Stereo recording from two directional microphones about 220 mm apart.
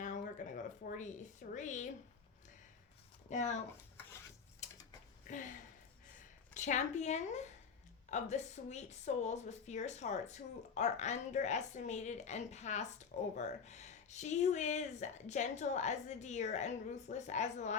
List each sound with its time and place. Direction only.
0.0 s a sound: 35° left (ahead or behind)
3.2 s speech: 30° left (ahead or behind)
5.3 s speech: 35° left (ahead or behind)